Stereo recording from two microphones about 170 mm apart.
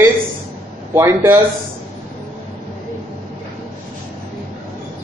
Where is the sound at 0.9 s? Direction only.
15° right (ahead or behind).